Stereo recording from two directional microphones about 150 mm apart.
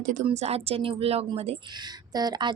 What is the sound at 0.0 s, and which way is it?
Speech, 55° right (ahead or behind).